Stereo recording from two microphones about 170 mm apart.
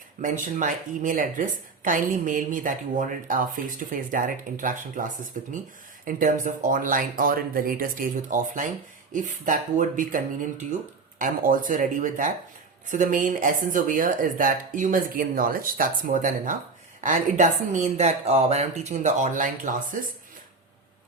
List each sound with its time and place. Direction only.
0.2 s speech: 50° right (ahead or behind)